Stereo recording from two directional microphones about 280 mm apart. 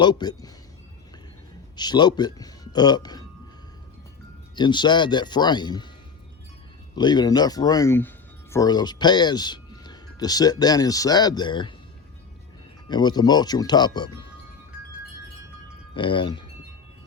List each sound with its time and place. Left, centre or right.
0.0 s speech: centre
1.7 s speech: centre
4.5 s speech: centre
6.9 s speech: centre
12.9 s speech: centre
16.0 s speech: centre